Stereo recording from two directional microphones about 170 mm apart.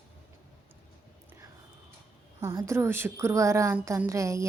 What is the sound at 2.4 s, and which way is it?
A woman's voice, 15° right (ahead or behind).